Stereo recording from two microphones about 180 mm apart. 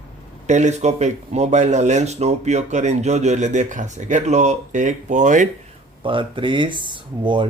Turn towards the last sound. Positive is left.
turn(degrees=-25)  # may be behind; listen again after turning